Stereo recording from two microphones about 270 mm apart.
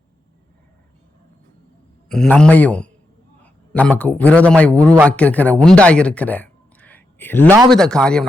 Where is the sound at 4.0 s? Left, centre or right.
Centre.